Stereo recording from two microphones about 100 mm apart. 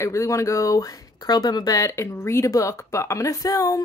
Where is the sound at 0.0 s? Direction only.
30° left (ahead or behind).